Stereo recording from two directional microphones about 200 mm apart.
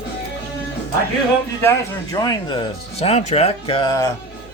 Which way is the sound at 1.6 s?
15° left (ahead or behind).